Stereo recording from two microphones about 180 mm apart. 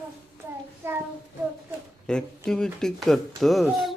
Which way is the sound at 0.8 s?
15° right (ahead or behind).